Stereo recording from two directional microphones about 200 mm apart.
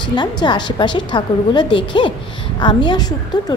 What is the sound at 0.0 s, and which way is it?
A woman's voice, 20° left (ahead or behind).